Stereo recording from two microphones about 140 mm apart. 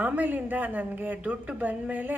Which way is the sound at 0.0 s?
10° right (ahead or behind).